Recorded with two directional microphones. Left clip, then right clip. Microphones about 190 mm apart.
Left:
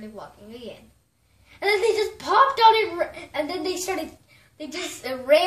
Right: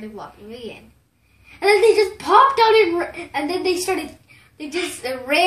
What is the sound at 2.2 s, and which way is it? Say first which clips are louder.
A woman's voice: right 1 dB; 5° left (ahead or behind).